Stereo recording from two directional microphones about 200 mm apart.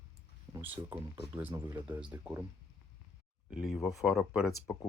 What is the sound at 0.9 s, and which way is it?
Speech, 25° right (ahead or behind).